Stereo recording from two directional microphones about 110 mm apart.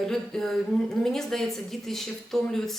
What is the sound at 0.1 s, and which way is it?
Speech, 5° left (ahead or behind).